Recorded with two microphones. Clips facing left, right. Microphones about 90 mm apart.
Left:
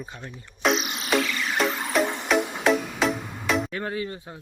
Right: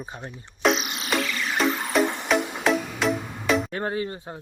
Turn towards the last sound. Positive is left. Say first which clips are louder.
# right 2 dB
turn(degrees=-30)  # may be behind; listen again after turning